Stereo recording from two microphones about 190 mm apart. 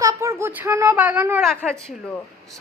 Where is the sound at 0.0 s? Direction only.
15° right (ahead or behind).